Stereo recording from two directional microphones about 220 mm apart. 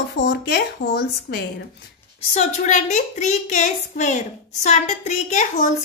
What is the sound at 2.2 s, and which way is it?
Speech, 30° left (ahead or behind).